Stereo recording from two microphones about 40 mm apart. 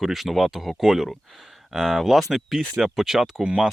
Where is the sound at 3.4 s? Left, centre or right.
Right.